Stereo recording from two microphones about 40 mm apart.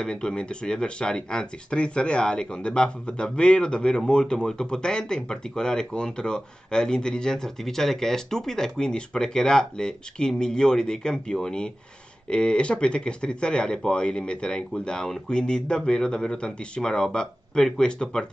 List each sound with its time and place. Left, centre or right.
0.0 s speech: centre